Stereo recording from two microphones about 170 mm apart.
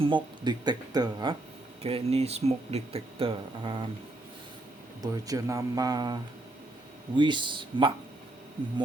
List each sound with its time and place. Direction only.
0.0 s speech: 25° right (ahead or behind)
5.1 s speech: 20° right (ahead or behind)
7.2 s speech: 30° right (ahead or behind)